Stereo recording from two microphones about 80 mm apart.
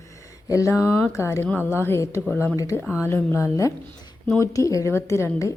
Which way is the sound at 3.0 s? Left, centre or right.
Left.